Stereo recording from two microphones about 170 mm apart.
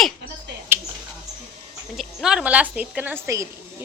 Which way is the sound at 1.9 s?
Centre (ahead or behind).